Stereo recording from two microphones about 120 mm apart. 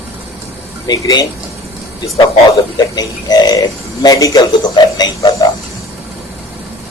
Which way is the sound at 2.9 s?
35° left (ahead or behind).